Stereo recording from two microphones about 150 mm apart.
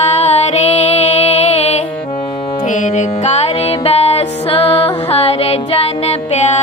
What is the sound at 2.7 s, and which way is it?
Music, 55° left (ahead or behind).